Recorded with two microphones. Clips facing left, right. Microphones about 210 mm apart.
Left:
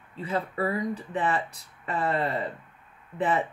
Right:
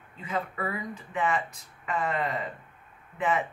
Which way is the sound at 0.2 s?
35° left (ahead or behind).